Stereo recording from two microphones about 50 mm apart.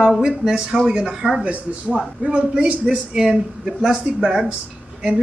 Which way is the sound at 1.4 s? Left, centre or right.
Right.